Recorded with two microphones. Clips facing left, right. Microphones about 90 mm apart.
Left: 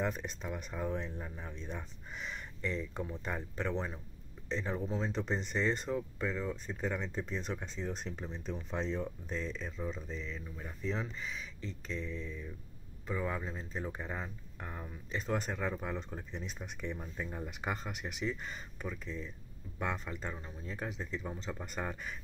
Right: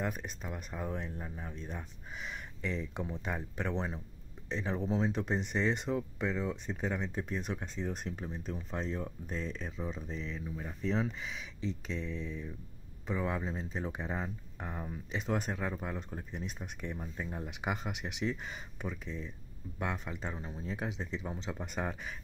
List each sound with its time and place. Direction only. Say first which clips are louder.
0.0 s speech: left 1 dB; 5° right (ahead or behind)
19.8 s speech: even; 5° right (ahead or behind)
20.2 s speech: right 2 dB; 15° right (ahead or behind)